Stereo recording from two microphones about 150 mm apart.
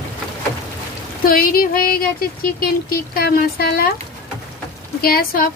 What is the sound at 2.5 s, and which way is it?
Speech, 85° left.